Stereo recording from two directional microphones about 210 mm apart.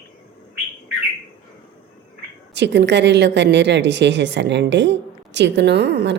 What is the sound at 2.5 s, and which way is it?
A woman's voice, 55° right (ahead or behind).